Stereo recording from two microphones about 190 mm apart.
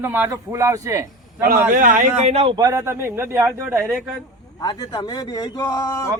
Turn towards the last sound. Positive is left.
turn(degrees=20)  # may be behind; listen again after turning